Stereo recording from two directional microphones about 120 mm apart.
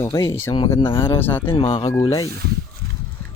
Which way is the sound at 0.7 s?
45° left (ahead or behind).